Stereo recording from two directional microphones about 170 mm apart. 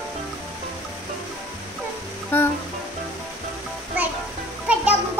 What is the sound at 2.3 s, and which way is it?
Speech, 10° left (ahead or behind).